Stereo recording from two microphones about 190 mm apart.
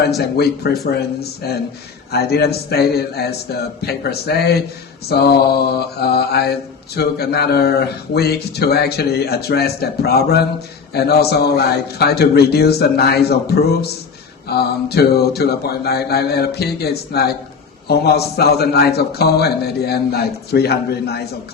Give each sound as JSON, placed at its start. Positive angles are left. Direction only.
{"t": 0.9, "sound": "mantra", "side_deg": 55}